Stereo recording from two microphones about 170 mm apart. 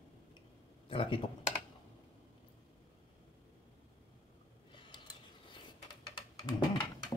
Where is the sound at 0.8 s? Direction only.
30° left (ahead or behind).